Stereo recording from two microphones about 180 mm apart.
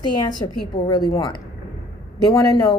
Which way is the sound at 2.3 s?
25° left (ahead or behind).